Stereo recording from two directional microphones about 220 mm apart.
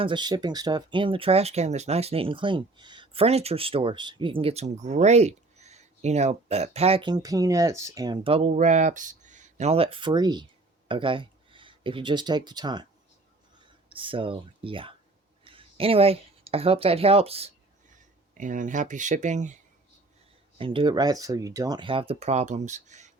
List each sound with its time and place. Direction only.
0.0 s speech: 20° right (ahead or behind)
13.9 s speech: 25° right (ahead or behind)
20.6 s speech: 25° right (ahead or behind)